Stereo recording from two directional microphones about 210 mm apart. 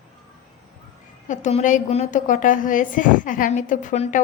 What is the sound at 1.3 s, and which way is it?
A woman's voice, 35° left (ahead or behind).